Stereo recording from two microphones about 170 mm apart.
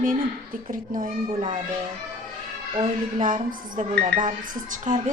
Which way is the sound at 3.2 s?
55° right (ahead or behind).